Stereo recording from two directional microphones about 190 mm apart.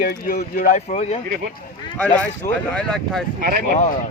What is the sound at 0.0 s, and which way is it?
Speech, 50° left (ahead or behind).